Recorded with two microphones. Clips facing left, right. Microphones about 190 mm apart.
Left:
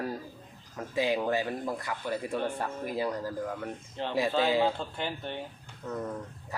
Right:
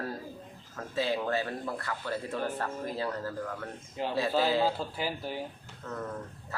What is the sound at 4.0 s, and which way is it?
Speech, 10° right (ahead or behind).